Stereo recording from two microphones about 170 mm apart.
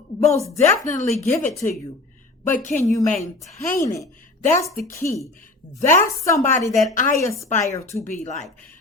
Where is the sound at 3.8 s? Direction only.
20° left (ahead or behind).